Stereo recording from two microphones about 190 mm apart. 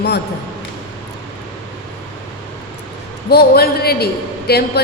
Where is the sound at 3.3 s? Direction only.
55° left (ahead or behind).